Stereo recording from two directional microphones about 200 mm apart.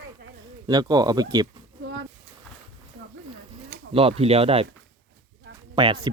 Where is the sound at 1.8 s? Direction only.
70° right (ahead or behind).